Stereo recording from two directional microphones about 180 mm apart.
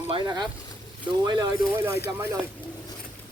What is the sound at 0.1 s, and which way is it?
Speech, 25° right (ahead or behind).